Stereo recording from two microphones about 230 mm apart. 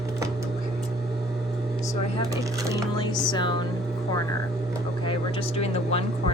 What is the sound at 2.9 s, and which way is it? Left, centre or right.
Speech, centre.